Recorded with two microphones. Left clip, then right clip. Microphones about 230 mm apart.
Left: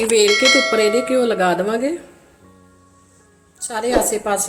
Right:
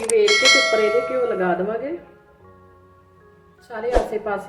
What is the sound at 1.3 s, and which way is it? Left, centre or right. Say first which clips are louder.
Speech: left 4 dB; left.